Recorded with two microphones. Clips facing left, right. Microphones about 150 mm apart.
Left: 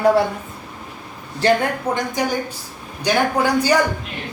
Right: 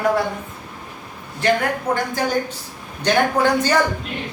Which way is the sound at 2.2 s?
15° left (ahead or behind).